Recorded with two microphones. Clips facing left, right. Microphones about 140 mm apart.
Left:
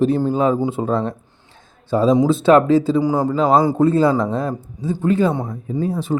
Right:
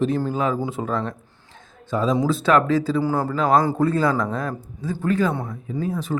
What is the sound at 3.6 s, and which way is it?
Speech, 10° left (ahead or behind).